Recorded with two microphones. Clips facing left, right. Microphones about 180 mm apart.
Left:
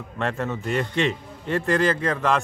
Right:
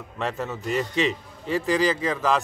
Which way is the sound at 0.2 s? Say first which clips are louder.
Left 2 dB; centre (ahead or behind).